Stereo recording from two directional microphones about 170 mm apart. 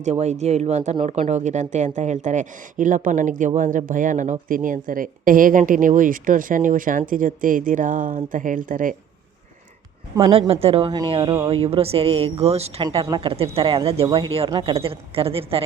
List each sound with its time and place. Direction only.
0.0 s a woman's voice: 40° right (ahead or behind)
10.2 s a woman's voice: 35° right (ahead or behind)